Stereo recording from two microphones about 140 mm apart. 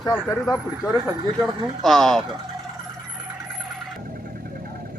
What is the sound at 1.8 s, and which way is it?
Speech, centre (ahead or behind).